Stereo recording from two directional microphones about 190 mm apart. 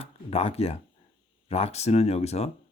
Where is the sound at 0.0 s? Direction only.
30° left (ahead or behind).